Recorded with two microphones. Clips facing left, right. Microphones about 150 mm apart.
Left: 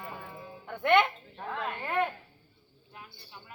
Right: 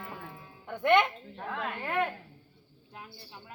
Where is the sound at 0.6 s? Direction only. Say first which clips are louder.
Even; 15° right (ahead or behind).